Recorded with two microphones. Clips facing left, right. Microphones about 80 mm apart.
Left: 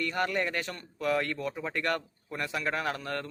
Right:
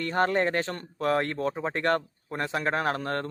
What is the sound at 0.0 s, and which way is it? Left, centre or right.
A man's voice, right.